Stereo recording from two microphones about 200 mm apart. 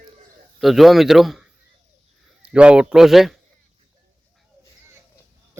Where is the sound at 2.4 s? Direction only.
5° right (ahead or behind).